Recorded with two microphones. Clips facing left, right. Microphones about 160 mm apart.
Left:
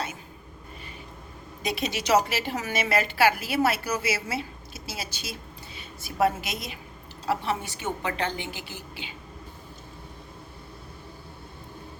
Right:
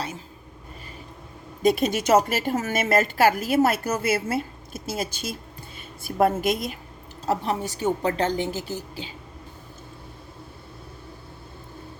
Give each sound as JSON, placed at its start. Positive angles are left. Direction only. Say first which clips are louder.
{"t": 1.6, "sound": "a woman's voice", "louder": "right 8 dB", "side_deg": -50}